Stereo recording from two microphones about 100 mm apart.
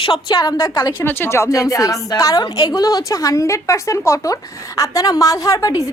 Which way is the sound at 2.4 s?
50° left (ahead or behind).